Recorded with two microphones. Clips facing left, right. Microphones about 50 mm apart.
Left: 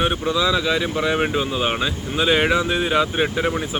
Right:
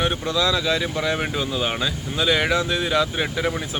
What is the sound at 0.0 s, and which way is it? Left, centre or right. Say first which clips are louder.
Speech: left 2 dB; centre.